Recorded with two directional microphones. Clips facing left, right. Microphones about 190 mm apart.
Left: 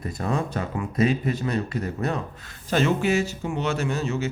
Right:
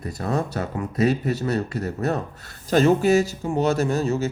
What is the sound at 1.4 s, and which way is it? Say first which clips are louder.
Speech: right 2 dB; 40° right (ahead or behind).